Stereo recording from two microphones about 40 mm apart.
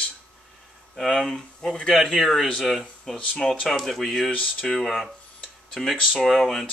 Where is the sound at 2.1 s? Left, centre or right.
Centre.